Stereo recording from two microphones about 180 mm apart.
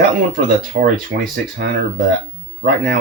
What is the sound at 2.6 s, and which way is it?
Speech, 55° right (ahead or behind).